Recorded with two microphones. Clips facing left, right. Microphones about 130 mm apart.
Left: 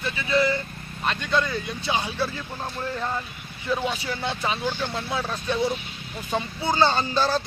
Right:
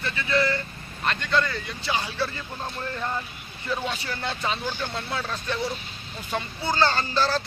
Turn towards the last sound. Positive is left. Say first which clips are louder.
# left 1 dB
turn(degrees=15)  # may be behind; listen again after turning